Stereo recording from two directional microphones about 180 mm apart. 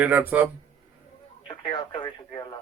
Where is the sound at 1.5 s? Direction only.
25° left (ahead or behind).